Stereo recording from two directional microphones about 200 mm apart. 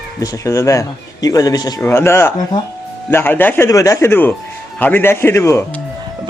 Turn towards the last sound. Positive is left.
turn(degrees=15)  # may be behind; listen again after turning